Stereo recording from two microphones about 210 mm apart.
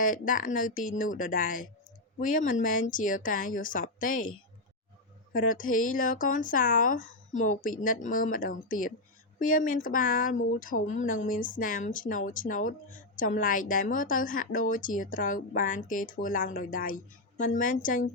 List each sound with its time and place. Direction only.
0.0 s speech: 40° left (ahead or behind)
5.3 s speech: 40° left (ahead or behind)